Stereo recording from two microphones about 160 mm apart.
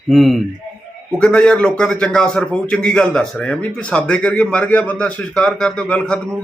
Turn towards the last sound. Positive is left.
turn(degrees=5)  # may be behind; listen again after turning